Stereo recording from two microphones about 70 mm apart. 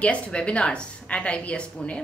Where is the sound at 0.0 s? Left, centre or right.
Centre.